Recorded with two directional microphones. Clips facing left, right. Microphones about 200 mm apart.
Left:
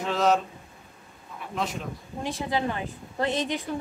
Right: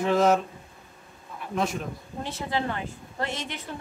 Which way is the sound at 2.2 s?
15° left (ahead or behind).